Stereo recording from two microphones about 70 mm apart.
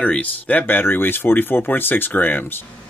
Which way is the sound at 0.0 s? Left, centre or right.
Left.